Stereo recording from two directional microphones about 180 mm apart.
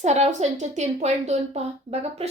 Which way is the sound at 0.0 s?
40° right (ahead or behind).